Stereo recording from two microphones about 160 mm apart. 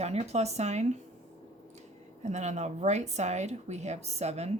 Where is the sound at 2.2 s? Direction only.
45° right (ahead or behind).